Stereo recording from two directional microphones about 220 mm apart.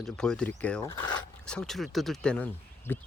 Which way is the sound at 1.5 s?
5° left (ahead or behind).